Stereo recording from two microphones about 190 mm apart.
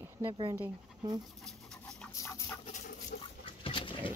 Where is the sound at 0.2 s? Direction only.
25° right (ahead or behind).